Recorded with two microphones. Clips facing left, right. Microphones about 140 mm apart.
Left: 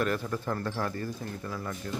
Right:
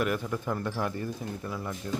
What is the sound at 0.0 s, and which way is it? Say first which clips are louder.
Speech: even; 10° right (ahead or behind).